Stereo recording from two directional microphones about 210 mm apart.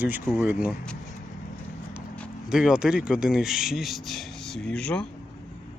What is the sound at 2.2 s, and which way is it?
Speech, 5° right (ahead or behind).